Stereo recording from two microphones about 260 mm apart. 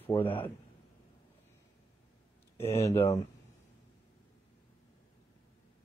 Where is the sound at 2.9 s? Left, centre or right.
Left.